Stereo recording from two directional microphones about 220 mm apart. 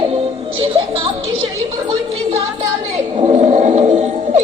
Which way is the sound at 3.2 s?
25° right (ahead or behind).